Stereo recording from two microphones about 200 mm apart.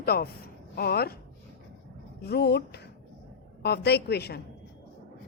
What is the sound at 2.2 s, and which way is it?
A woman's voice, 50° left (ahead or behind).